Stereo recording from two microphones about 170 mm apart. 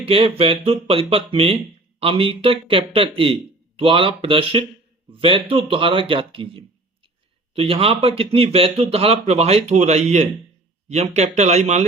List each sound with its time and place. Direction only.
0.0 s speech: 35° right (ahead or behind)